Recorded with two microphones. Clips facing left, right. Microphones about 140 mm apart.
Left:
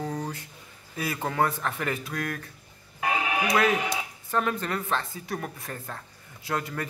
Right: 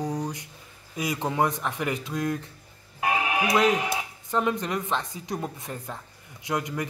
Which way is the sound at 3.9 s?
15° right (ahead or behind).